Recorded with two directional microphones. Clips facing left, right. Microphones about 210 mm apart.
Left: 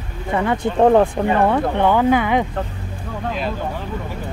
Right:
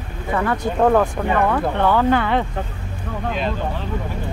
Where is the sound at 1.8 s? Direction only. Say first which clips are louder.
Left 1 dB; 15° left (ahead or behind).